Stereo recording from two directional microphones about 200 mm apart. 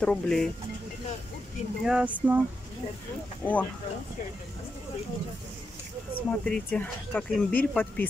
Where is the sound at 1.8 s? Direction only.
5° right (ahead or behind).